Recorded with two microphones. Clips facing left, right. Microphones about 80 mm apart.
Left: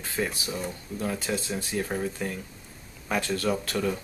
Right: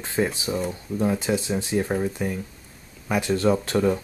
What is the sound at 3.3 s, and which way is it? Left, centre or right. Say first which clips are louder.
Speech: right 10 dB; right.